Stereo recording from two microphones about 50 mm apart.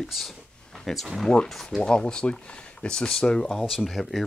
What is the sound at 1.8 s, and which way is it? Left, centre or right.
Speech, centre.